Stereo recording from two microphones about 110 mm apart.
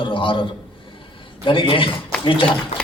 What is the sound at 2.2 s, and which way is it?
Speech, 50° left (ahead or behind).